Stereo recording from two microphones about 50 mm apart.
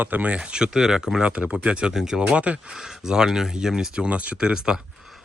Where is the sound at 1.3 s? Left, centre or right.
Right.